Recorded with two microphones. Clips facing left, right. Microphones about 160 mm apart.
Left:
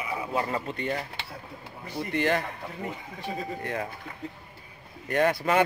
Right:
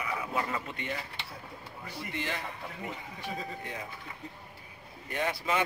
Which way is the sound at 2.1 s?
60° left (ahead or behind).